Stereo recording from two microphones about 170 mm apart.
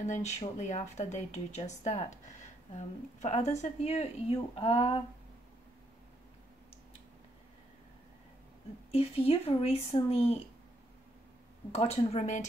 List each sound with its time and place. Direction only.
0.0 s a woman's voice: 40° left (ahead or behind)
8.9 s a woman's voice: 35° left (ahead or behind)
11.7 s a woman's voice: 35° left (ahead or behind)